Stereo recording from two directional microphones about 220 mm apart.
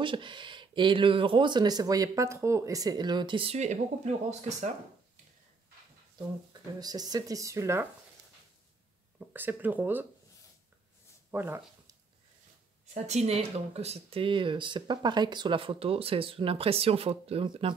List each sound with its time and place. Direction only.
0.0 s speech: 20° right (ahead or behind)
6.8 s speech: 15° right (ahead or behind)
9.3 s speech: 10° right (ahead or behind)
11.3 s speech: 10° right (ahead or behind)
12.9 s speech: 30° right (ahead or behind)